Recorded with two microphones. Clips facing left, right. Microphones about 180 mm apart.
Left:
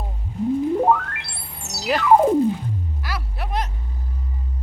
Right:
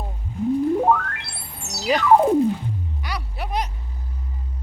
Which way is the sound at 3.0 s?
Centre (ahead or behind).